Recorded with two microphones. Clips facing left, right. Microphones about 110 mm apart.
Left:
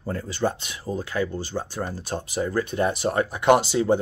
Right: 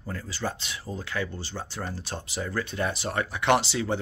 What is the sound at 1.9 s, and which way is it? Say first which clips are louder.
Speech: left 6 dB; 45° left (ahead or behind).